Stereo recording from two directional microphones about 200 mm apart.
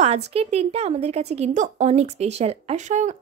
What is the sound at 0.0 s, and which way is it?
A woman's voice, 30° right (ahead or behind).